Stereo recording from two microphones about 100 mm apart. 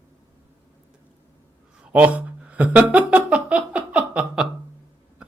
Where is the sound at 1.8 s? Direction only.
15° right (ahead or behind).